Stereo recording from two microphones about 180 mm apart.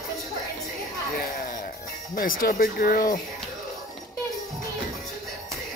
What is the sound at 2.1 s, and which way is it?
Speech, 50° left (ahead or behind).